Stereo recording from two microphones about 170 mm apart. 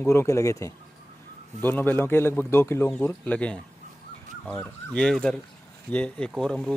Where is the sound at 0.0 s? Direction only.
15° left (ahead or behind).